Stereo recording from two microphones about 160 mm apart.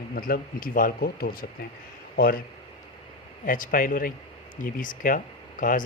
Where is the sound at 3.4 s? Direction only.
60° left (ahead or behind).